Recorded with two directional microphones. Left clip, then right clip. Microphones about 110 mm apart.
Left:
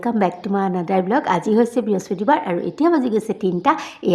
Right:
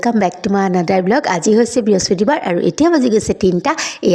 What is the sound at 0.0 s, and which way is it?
A woman's voice, 35° right (ahead or behind).